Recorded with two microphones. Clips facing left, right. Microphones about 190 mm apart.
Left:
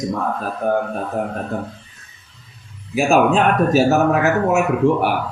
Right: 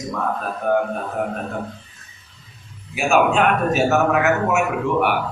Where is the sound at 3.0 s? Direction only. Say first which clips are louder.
Left 2 dB; 35° left (ahead or behind).